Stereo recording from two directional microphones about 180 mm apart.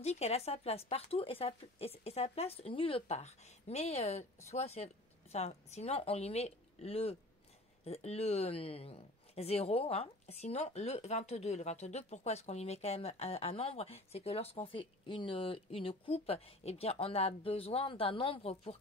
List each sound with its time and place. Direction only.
0.0 s speech: 35° left (ahead or behind)